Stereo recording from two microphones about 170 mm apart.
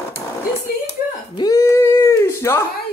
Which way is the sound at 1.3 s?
20° left (ahead or behind).